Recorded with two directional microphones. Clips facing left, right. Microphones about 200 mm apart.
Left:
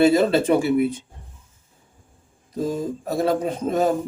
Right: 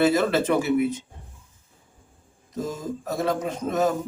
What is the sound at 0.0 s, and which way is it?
Speech, 25° left (ahead or behind).